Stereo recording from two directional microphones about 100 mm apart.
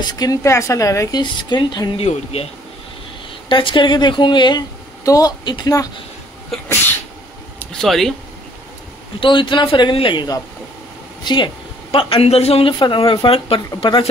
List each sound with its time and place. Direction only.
0.0 s a woman's voice: 40° left (ahead or behind)
0.4 s a woman's voice: 30° left (ahead or behind)
1.1 s speech: 45° left (ahead or behind)
3.4 s speech: 55° left (ahead or behind)
5.0 s a woman's voice: 40° left (ahead or behind)
7.5 s a sound: 5° left (ahead or behind)
9.2 s a man's voice: 55° left (ahead or behind); by 12.7 s 80° left
12.7 s speech: 55° left (ahead or behind)